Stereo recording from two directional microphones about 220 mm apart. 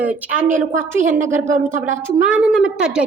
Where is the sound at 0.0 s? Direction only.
5° right (ahead or behind).